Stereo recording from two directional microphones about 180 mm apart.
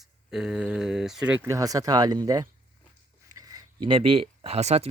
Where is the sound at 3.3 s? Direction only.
20° right (ahead or behind).